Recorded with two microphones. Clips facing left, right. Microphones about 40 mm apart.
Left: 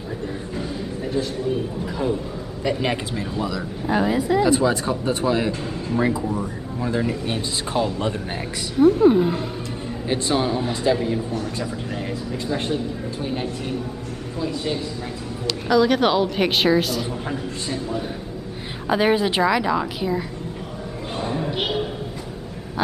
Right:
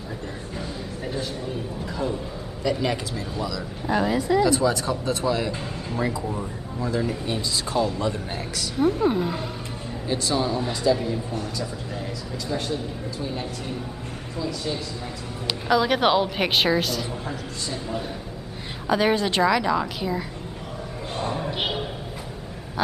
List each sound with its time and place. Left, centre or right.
2.8 s speech: left
3.8 s speech: centre; by 8.1 s left
8.7 s speech: centre
10.0 s a man's voice: left
12.5 s speech: left
15.4 s a woman's voice: centre
18.9 s a woman's voice: centre
21.2 s a sound: centre